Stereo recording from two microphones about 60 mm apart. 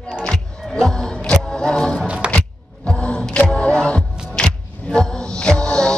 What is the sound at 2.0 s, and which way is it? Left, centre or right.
Music, centre.